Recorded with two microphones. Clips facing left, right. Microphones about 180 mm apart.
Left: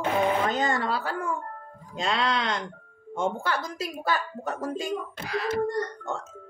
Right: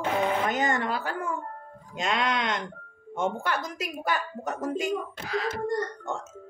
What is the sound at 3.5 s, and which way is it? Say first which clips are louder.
A woman's voice: left 1 dB; 15° right (ahead or behind).